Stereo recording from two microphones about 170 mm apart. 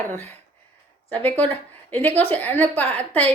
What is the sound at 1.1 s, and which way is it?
A woman's voice, 10° left (ahead or behind).